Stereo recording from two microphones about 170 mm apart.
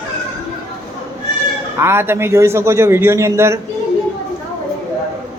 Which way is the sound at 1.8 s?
15° right (ahead or behind).